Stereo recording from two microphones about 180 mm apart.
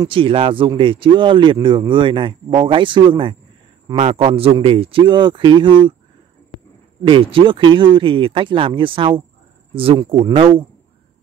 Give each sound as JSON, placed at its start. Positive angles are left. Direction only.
{"t": 0.0, "sound": "speech", "side_deg": -30}
{"t": 7.1, "sound": "speech", "side_deg": -30}